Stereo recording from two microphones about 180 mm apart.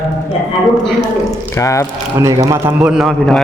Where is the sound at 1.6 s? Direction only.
15° left (ahead or behind).